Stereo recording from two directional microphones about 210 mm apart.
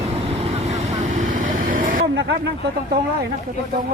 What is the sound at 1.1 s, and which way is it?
Vehicle, 35° right (ahead or behind).